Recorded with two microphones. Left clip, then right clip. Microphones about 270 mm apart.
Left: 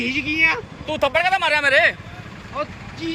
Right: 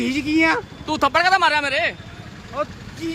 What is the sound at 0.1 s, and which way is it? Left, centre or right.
Speech, centre.